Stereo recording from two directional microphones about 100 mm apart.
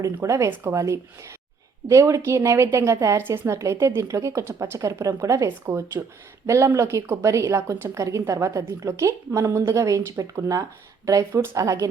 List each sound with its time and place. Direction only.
0.0 s a woman's voice: 30° right (ahead or behind)